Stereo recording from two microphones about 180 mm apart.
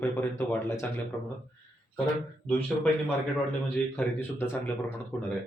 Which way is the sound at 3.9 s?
10° left (ahead or behind).